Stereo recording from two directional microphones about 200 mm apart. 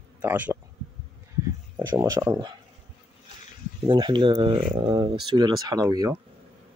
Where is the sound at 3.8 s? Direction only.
25° right (ahead or behind).